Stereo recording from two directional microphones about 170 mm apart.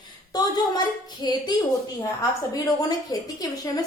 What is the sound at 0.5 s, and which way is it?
A woman's voice, 25° left (ahead or behind).